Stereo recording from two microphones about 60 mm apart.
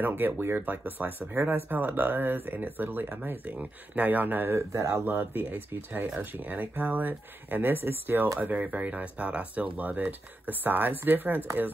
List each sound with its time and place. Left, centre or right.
0.0 s speech: right
4.6 s speech: right
5.0 s speech: right
8.4 s speech: right